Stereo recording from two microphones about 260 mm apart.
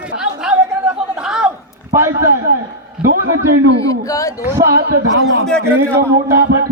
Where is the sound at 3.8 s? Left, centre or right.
Centre.